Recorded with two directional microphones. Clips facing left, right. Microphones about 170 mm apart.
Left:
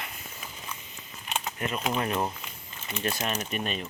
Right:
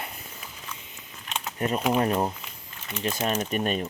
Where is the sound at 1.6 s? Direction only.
40° right (ahead or behind).